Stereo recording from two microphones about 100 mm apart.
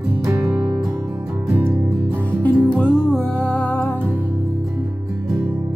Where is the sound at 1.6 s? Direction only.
20° right (ahead or behind).